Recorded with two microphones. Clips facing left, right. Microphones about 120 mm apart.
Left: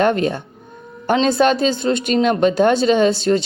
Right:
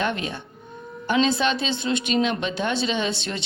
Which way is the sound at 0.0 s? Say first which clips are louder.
Left 10 dB; 45° left (ahead or behind).